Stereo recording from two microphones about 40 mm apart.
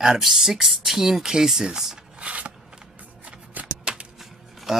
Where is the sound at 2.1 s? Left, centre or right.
Right.